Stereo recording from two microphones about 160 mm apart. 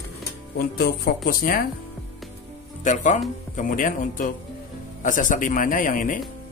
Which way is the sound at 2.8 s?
50° left (ahead or behind).